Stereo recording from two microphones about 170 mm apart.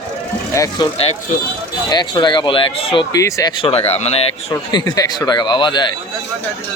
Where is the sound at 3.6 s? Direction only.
35° left (ahead or behind).